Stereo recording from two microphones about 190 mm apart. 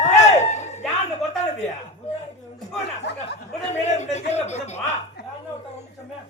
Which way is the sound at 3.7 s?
35° left (ahead or behind).